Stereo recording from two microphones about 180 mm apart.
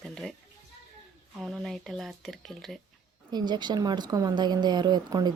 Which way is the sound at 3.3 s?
25° right (ahead or behind).